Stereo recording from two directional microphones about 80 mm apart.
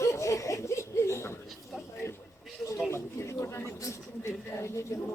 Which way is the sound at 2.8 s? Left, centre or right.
Left.